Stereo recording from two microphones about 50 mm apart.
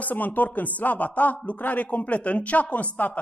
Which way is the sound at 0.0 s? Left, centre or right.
Left.